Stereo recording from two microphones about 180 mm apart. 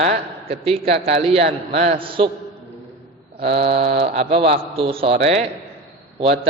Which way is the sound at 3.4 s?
30° right (ahead or behind).